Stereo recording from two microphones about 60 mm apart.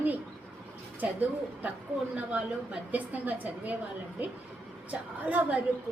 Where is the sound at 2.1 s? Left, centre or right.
Centre.